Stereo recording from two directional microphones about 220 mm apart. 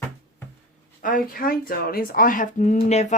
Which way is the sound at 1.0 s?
40° left (ahead or behind).